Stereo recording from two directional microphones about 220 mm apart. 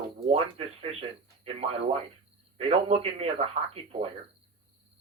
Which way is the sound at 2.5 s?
25° right (ahead or behind).